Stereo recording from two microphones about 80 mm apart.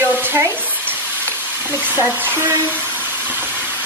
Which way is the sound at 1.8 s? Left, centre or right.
Right.